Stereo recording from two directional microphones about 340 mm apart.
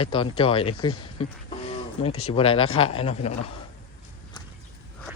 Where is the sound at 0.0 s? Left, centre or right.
Centre.